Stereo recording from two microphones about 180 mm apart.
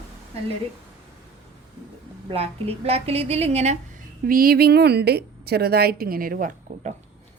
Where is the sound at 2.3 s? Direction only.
35° right (ahead or behind).